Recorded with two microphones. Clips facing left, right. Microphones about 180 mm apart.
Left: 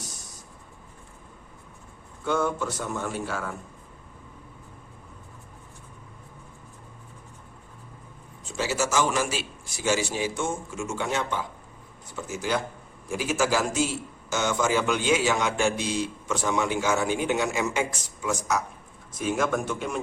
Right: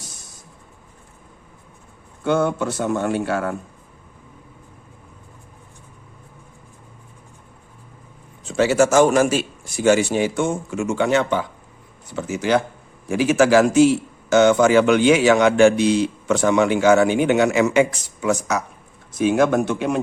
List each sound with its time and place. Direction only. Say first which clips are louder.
2.2 s a man's voice: right 7 dB; 70° right (ahead or behind)
8.4 s a man's voice: right 11 dB; 65° right (ahead or behind)